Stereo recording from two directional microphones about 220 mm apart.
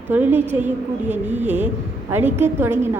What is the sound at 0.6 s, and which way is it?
Speech, 30° right (ahead or behind).